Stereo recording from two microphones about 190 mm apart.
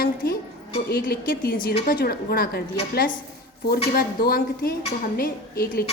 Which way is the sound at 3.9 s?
50° left (ahead or behind).